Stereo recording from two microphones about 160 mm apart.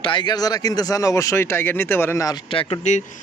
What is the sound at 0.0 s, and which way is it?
Speech, 30° left (ahead or behind).